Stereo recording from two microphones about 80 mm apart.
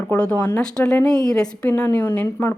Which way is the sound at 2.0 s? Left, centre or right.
Centre.